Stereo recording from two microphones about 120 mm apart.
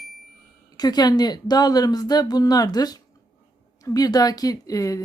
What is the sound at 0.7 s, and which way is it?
Speech, 35° left (ahead or behind).